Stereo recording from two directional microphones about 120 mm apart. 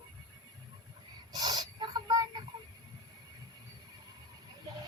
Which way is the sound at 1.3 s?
35° right (ahead or behind).